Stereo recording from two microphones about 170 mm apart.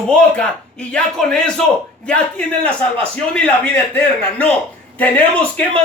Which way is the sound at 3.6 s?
10° left (ahead or behind).